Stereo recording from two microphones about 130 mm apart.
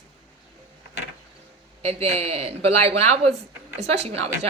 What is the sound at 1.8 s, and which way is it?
A woman's voice, 55° right (ahead or behind).